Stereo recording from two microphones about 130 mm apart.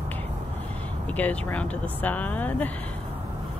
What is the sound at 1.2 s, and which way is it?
Speech, 10° left (ahead or behind).